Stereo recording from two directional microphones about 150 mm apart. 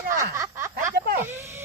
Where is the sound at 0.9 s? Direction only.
90° right.